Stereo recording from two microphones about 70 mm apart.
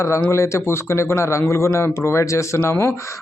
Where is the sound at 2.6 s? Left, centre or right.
Left.